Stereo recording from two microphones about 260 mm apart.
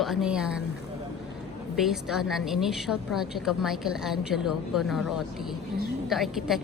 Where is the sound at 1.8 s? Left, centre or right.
Centre.